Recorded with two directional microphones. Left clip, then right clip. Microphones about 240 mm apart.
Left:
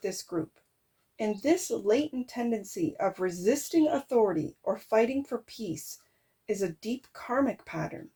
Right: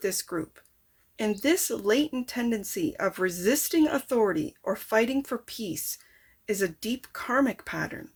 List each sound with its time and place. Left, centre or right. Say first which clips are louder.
0.0 s speech: right 3 dB; right